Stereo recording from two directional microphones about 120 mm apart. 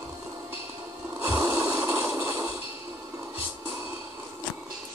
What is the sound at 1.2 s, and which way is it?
Snort, 25° right (ahead or behind).